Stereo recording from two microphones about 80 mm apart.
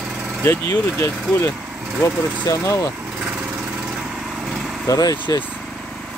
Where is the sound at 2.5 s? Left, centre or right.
Left.